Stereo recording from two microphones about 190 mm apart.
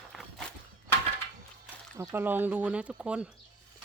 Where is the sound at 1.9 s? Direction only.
15° right (ahead or behind).